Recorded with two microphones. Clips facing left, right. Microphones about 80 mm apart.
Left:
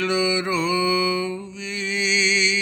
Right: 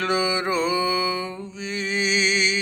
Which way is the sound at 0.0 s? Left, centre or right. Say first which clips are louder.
Left 1 dB; right.